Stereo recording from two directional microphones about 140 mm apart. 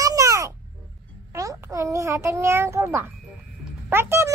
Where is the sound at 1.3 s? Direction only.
20° right (ahead or behind).